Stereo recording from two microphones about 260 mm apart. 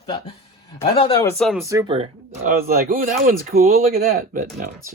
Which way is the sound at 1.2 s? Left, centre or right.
Centre.